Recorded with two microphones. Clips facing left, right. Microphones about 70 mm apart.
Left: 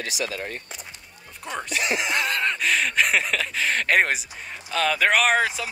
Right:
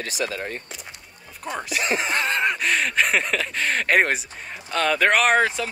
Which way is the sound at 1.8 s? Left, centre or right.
Right.